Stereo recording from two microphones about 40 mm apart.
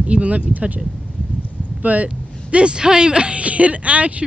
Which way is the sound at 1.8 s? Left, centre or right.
Right.